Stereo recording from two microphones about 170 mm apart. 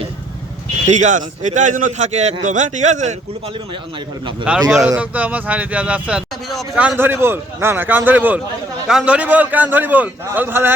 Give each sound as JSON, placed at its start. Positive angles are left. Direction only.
{"t": 0.9, "sound": "a man's voice", "side_deg": -45}
{"t": 4.5, "sound": "speech", "side_deg": -5}